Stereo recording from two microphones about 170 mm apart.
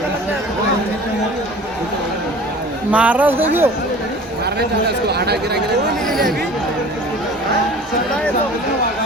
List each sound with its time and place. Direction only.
2.9 s speech: 10° right (ahead or behind)
4.9 s speech: 70° right (ahead or behind)
6.1 s speech: centre (ahead or behind)